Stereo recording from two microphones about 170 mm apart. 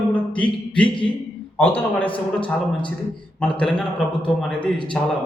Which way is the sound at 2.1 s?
30° left (ahead or behind).